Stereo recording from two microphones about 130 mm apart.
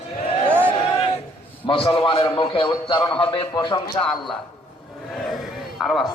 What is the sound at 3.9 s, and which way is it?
Speech, 5° left (ahead or behind).